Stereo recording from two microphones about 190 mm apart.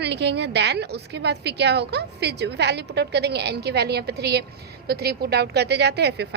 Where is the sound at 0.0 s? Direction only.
65° right (ahead or behind).